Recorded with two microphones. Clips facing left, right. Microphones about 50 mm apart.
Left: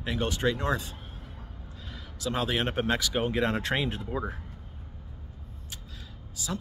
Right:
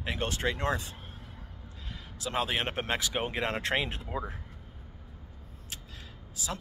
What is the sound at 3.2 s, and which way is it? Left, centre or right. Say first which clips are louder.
Speech: left 4 dB; centre.